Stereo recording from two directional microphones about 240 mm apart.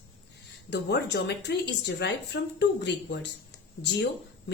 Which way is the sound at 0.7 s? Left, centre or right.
Left.